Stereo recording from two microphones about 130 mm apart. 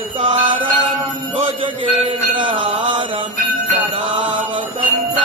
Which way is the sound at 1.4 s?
40° right (ahead or behind).